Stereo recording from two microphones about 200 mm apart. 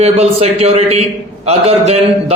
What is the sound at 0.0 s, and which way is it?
A man's voice, 30° right (ahead or behind).